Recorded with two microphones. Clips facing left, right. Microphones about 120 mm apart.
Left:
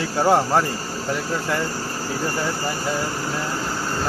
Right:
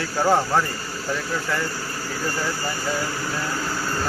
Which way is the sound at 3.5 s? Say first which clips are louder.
Left 1 dB; 20° left (ahead or behind).